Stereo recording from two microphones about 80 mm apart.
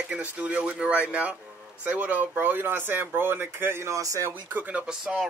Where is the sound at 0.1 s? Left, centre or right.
Centre; by 4.3 s right.